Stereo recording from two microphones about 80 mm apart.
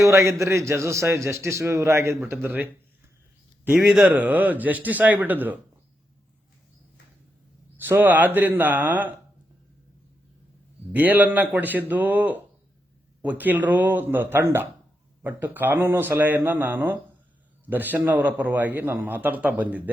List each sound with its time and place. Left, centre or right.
0.0 s a man's voice: right
3.8 s speech: centre
4.0 s a man's voice: centre
7.8 s a man's voice: right
10.9 s a man's voice: right